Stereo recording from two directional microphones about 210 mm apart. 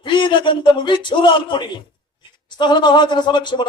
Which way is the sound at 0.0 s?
20° left (ahead or behind).